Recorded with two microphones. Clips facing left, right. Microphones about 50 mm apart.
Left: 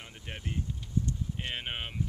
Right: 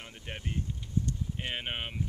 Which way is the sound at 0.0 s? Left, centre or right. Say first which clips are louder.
Right 1 dB; centre.